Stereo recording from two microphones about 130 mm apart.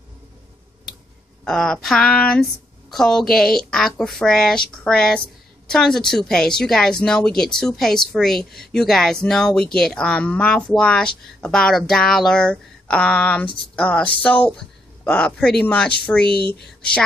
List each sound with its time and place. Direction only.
1.4 s speech: 5° left (ahead or behind)